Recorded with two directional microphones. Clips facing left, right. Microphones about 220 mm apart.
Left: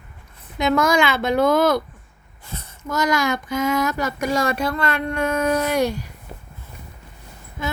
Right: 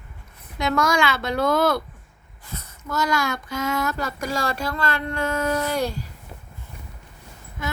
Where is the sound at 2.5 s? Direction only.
30° left (ahead or behind).